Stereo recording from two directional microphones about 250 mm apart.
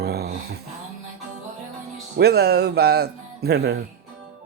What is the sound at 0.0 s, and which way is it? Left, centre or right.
Music, right.